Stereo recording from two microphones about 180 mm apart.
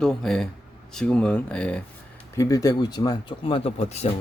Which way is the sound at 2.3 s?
20° left (ahead or behind).